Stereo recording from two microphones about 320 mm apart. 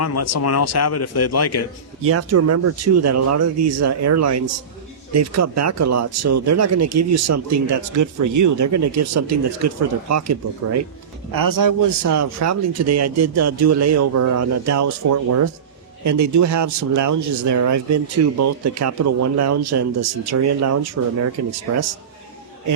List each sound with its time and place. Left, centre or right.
0.0 s speech: left
2.0 s speech: right
11.3 s speech: right